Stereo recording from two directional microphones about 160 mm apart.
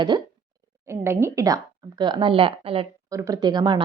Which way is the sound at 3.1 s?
20° right (ahead or behind).